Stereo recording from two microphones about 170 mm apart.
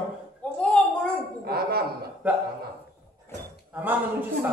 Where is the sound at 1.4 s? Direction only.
65° right (ahead or behind).